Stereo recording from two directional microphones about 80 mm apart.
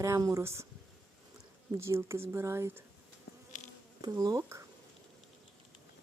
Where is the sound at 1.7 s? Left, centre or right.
Right.